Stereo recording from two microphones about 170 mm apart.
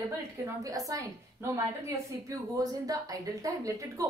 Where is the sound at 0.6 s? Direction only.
20° right (ahead or behind).